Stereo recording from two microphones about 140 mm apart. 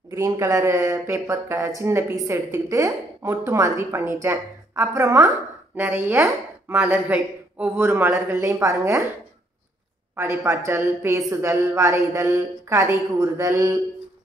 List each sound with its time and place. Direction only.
0.1 s a woman's voice: 20° right (ahead or behind)
10.1 s a woman's voice: 20° right (ahead or behind)